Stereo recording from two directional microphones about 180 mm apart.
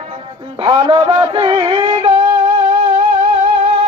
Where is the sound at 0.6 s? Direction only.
30° right (ahead or behind).